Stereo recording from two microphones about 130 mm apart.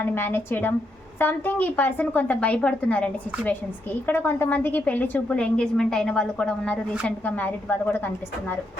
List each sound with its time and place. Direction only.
0.0 s a woman's voice: 15° left (ahead or behind)